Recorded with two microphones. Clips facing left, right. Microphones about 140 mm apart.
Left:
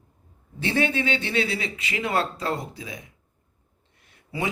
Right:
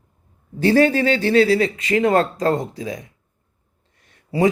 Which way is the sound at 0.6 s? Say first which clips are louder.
Right 9 dB; 40° right (ahead or behind).